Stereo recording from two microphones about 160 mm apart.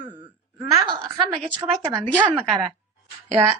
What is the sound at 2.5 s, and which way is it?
A woman's voice, 30° right (ahead or behind).